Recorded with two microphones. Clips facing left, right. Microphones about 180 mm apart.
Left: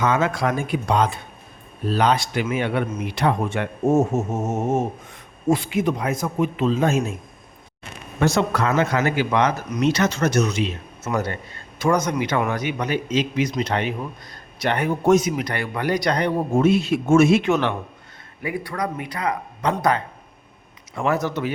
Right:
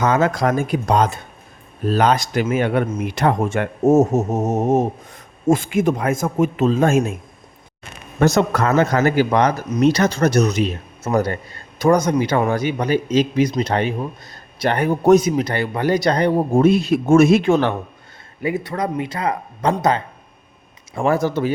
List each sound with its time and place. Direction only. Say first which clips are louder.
0.0 s speech: right 3 dB; 40° right (ahead or behind)
8.2 s speech: right 4 dB; 45° right (ahead or behind)
18.4 s speech: right 4 dB; 25° right (ahead or behind)